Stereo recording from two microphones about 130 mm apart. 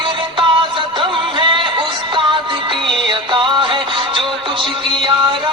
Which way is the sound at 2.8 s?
40° right (ahead or behind).